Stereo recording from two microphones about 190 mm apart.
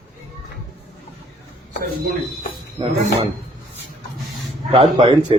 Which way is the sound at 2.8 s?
25° right (ahead or behind).